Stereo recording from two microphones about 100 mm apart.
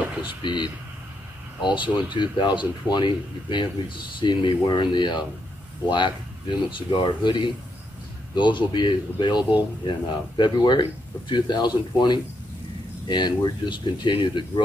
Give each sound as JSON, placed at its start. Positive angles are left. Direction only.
{"t": 0.4, "sound": "speech", "side_deg": 50}